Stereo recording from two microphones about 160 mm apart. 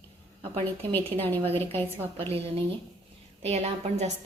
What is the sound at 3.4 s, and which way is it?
Speech, 40° right (ahead or behind).